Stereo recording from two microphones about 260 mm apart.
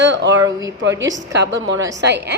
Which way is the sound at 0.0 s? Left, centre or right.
Right.